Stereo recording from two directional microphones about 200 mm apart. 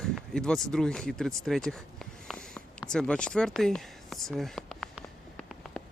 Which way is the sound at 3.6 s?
Centre (ahead or behind).